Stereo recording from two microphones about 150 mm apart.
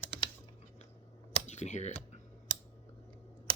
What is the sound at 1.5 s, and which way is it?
Speech, 50° left (ahead or behind).